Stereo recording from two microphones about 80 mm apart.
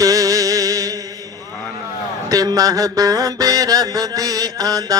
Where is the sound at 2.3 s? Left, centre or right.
Right.